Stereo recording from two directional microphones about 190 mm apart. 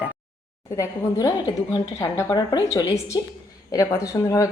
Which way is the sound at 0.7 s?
15° left (ahead or behind).